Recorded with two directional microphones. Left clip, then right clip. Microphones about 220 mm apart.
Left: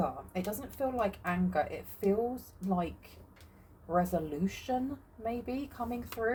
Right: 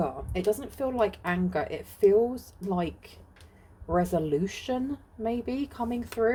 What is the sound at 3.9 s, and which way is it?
Speech, 50° right (ahead or behind).